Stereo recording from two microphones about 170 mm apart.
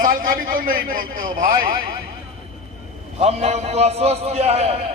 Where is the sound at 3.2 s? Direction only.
40° right (ahead or behind).